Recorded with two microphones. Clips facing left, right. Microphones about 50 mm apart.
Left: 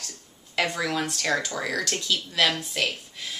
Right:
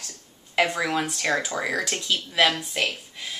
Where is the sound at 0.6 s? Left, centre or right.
Centre.